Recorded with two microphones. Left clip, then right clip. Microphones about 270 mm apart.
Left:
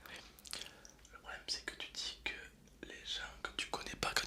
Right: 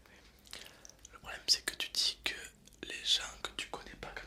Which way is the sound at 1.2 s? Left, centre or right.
Centre.